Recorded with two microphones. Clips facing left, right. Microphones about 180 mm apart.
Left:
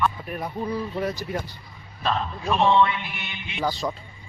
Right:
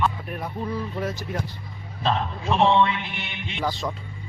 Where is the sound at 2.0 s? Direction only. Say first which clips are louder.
Right 1 dB; 25° right (ahead or behind).